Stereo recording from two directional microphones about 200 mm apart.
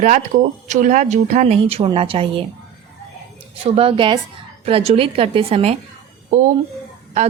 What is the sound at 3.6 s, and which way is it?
A woman's voice, 30° right (ahead or behind).